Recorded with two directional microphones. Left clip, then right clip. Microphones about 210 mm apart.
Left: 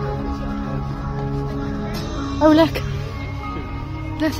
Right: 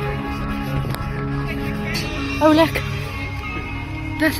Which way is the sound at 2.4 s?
20° left (ahead or behind).